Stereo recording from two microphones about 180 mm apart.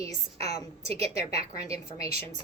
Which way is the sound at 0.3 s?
35° right (ahead or behind).